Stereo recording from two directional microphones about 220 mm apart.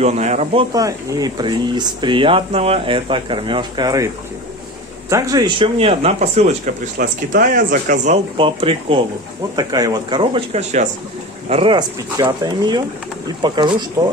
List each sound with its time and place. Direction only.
0.0 s speech: 30° right (ahead or behind)
0.7 s speech: 15° right (ahead or behind)
5.1 s speech: 15° right (ahead or behind)